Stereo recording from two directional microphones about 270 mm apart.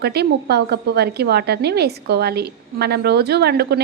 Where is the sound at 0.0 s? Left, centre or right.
Right.